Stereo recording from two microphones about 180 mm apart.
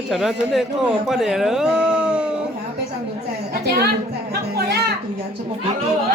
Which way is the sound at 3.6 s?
65° right (ahead or behind).